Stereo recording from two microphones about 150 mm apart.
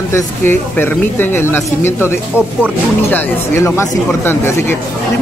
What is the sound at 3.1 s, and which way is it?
Speech, 15° left (ahead or behind).